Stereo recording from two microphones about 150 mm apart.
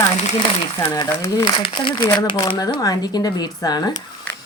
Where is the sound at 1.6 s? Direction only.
35° left (ahead or behind).